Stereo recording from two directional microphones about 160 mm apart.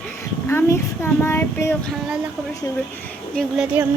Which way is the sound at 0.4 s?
15° left (ahead or behind).